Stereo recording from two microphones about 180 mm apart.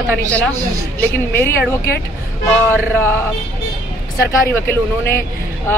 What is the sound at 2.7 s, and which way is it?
Speech, 15° left (ahead or behind).